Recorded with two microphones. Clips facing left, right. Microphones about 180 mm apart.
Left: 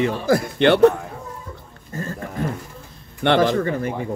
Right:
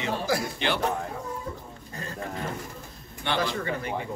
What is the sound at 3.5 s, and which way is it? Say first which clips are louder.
Speech: left 9 dB; 45° left (ahead or behind).